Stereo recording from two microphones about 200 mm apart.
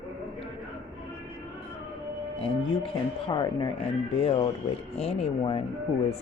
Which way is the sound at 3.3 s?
20° left (ahead or behind).